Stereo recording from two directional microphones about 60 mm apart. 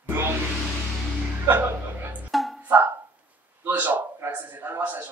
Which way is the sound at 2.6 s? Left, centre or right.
Right.